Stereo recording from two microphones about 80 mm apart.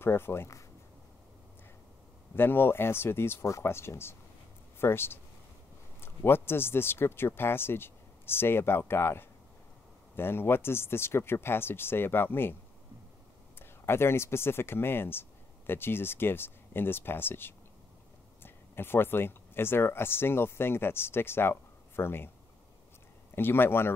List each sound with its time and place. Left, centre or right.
0.0 s speech: left
2.3 s speech: left
13.6 s speech: left
23.3 s speech: left